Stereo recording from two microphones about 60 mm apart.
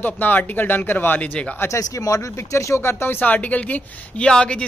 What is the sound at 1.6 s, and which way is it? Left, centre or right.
Speech, left.